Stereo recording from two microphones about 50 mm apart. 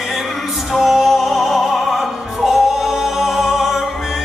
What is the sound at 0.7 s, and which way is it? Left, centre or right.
Music, centre.